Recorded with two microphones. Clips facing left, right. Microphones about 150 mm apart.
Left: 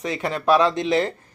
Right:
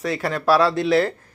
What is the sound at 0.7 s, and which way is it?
Speech, 5° right (ahead or behind).